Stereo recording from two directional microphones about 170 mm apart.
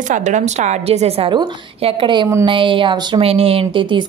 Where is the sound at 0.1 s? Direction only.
45° right (ahead or behind).